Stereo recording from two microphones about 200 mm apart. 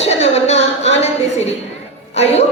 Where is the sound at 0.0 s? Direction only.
35° left (ahead or behind).